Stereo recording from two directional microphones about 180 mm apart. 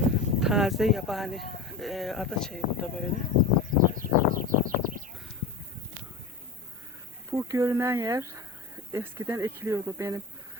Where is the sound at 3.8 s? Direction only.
50° right (ahead or behind).